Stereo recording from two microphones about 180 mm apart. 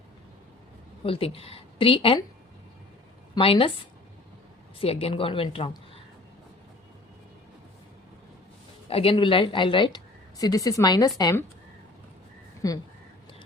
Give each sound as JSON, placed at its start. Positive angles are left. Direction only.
{"t": 1.0, "sound": "a woman's voice", "side_deg": 30}
{"t": 3.3, "sound": "a woman's voice", "side_deg": 30}
{"t": 4.8, "sound": "a woman's voice", "side_deg": 35}
{"t": 8.9, "sound": "a woman's voice", "side_deg": 30}
{"t": 12.6, "sound": "a woman's voice", "side_deg": 20}